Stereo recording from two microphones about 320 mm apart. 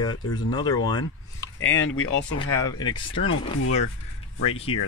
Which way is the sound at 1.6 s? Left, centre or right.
Left.